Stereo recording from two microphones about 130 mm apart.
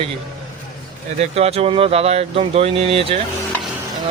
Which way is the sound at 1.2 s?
50° right (ahead or behind).